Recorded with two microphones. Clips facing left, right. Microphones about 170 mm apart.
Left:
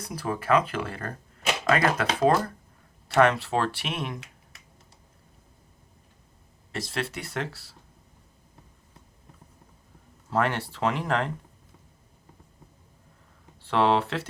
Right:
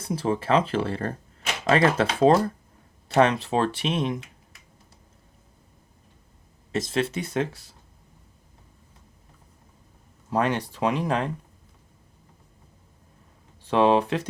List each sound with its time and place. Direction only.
0.0 s speech: 25° right (ahead or behind)
6.7 s speech: 20° right (ahead or behind)
10.2 s speech: 15° right (ahead or behind)
13.6 s speech: 15° right (ahead or behind)